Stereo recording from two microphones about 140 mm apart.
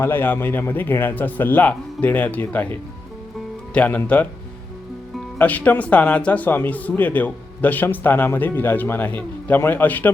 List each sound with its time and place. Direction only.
0.0 s speech: 15° left (ahead or behind)
3.8 s speech: 10° left (ahead or behind)
5.4 s speech: 10° left (ahead or behind)